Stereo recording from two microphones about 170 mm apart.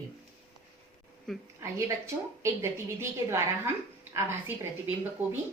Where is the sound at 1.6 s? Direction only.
20° right (ahead or behind).